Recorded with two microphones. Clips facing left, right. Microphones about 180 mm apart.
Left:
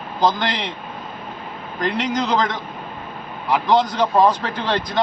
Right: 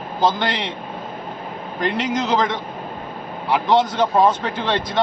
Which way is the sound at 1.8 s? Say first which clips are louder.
Even; centre (ahead or behind).